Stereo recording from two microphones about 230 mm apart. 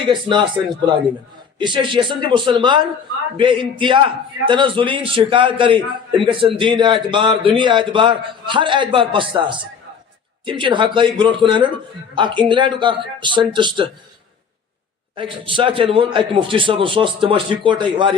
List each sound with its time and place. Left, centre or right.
0.0 s a man's voice: right
1.5 s a man's voice: centre
15.1 s a man's voice: right